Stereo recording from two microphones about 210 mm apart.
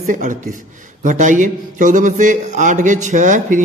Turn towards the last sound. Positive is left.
turn(degrees=-35)  # may be behind; listen again after turning